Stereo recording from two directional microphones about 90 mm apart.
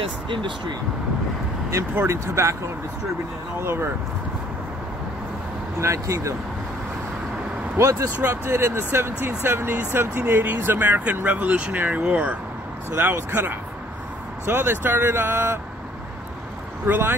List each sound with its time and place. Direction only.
0.0 s speech: 65° right (ahead or behind)
1.7 s speech: 30° right (ahead or behind)
3.6 s speech: 30° right (ahead or behind)
5.8 s speech: 35° right (ahead or behind)
7.7 s speech: 35° right (ahead or behind)
16.8 s speech: 25° right (ahead or behind)